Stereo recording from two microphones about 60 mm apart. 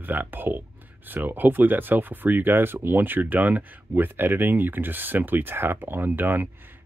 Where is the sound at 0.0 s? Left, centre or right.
Right.